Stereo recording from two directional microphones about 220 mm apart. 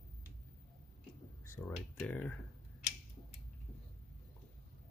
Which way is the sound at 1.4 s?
10° left (ahead or behind).